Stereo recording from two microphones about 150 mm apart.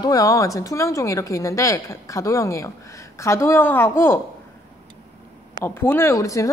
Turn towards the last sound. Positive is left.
turn(degrees=20)  # may be behind; listen again after turning